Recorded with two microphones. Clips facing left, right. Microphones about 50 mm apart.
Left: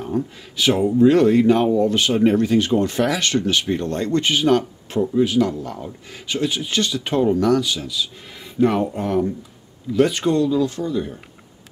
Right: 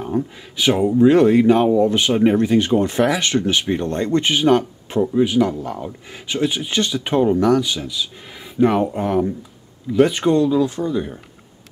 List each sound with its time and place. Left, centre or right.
0.0 s speech: centre